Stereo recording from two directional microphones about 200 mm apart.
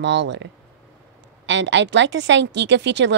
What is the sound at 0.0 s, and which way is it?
A woman's voice, 60° right (ahead or behind).